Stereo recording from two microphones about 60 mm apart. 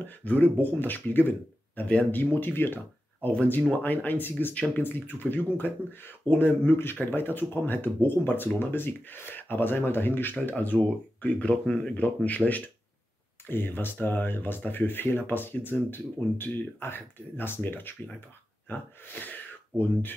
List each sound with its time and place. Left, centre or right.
0.0 s speech: left